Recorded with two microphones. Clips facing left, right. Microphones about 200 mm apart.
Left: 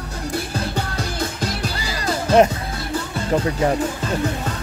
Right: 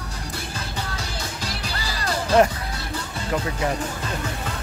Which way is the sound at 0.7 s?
55° left (ahead or behind).